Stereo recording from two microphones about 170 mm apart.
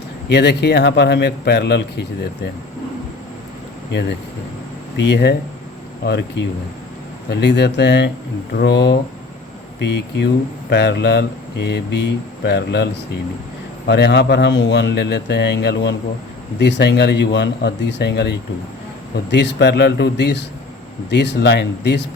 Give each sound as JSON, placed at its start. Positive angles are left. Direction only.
{"t": 0.3, "sound": "speech", "side_deg": 80}
{"t": 4.9, "sound": "a man's voice", "side_deg": 85}
{"t": 19.3, "sound": "speech", "side_deg": 90}